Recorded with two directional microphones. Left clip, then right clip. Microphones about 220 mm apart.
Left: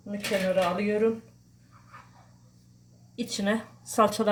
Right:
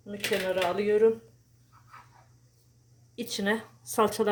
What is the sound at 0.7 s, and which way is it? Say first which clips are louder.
Speech: right 3 dB; 50° right (ahead or behind).